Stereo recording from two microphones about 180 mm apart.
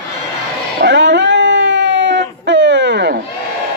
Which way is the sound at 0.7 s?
75° right (ahead or behind).